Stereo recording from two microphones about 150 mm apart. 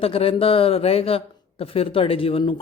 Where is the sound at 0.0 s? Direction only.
40° left (ahead or behind).